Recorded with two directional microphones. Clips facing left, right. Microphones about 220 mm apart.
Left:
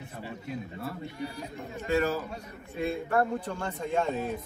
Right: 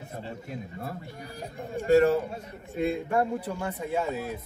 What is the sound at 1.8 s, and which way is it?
Speech, 30° right (ahead or behind).